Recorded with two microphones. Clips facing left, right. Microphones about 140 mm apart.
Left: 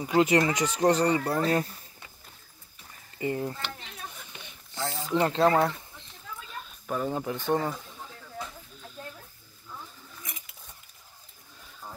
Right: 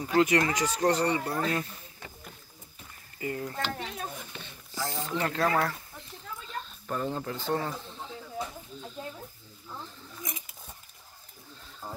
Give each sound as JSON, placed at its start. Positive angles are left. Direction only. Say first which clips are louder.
{"t": 0.0, "sound": "speech", "louder": "left 2 dB", "side_deg": 20}
{"t": 3.2, "sound": "speech", "louder": "left 4 dB", "side_deg": 25}
{"t": 3.5, "sound": "a child's voice", "louder": "right 6 dB", "side_deg": -40}
{"t": 4.3, "sound": "a sound", "louder": "right 3 dB", "side_deg": 15}
{"t": 5.1, "sound": "speech", "louder": "left 6 dB", "side_deg": 25}
{"t": 6.6, "sound": "speech", "louder": "left 3 dB", "side_deg": 5}
{"t": 9.0, "sound": "snake", "louder": "right 2 dB", "side_deg": -15}